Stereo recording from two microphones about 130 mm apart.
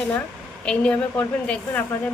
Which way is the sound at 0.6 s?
10° left (ahead or behind).